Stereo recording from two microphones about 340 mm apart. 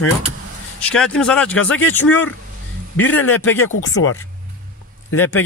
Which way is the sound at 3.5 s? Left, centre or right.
Left.